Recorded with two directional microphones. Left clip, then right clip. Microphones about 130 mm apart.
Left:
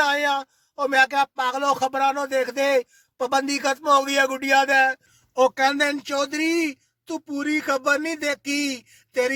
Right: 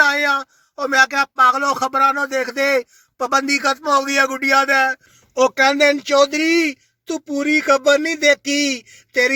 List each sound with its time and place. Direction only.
0.1 s speech: 15° left (ahead or behind)
5.4 s speech: 40° left (ahead or behind)